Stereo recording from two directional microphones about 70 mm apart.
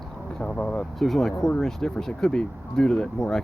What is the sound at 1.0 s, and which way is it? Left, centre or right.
Speech, centre.